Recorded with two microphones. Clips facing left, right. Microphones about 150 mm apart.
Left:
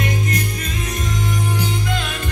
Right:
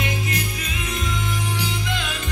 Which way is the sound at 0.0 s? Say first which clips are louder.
Left 4 dB; 45° left (ahead or behind).